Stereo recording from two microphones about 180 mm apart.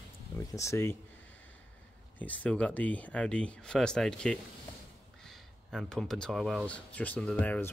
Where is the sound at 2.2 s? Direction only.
10° left (ahead or behind).